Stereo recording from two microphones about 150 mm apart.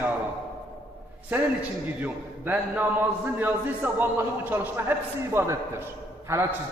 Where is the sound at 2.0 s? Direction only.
10° right (ahead or behind).